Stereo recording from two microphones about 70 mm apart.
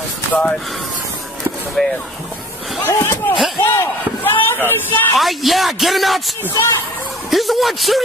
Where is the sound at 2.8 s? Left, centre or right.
Left.